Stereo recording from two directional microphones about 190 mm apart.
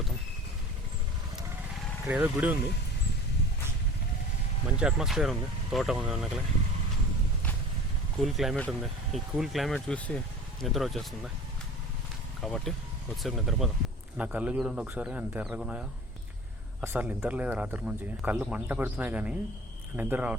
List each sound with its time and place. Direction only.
2.0 s speech: 10° right (ahead or behind)
4.8 s speech: 5° right (ahead or behind)
8.2 s speech: centre (ahead or behind)
12.4 s speech: centre (ahead or behind)